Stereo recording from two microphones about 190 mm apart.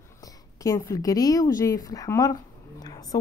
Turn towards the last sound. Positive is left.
turn(degrees=20)  # may be behind; listen again after turning